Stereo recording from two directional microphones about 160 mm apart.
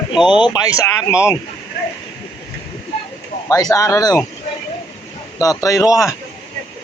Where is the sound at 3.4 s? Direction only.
20° left (ahead or behind).